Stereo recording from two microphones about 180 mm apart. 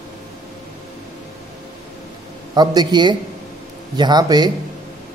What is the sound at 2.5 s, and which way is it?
Speech, 20° right (ahead or behind).